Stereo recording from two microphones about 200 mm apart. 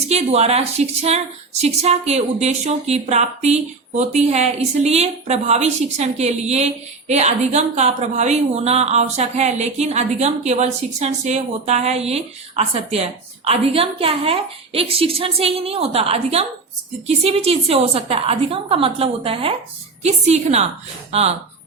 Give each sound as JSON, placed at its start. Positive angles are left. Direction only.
{"t": 0.1, "sound": "a woman's voice", "side_deg": -35}